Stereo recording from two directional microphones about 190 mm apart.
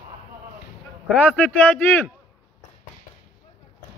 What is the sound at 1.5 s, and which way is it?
Speech, 10° left (ahead or behind).